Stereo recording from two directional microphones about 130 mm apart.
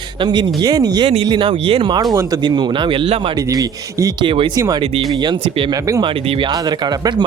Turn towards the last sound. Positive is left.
turn(degrees=-35)  # may be behind; listen again after turning